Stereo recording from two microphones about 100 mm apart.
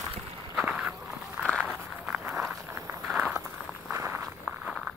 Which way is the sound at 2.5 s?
25° right (ahead or behind).